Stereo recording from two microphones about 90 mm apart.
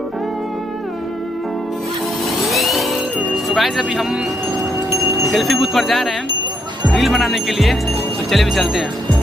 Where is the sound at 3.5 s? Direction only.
Centre (ahead or behind).